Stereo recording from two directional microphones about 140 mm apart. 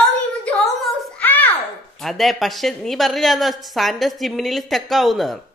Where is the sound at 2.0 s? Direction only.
Centre (ahead or behind).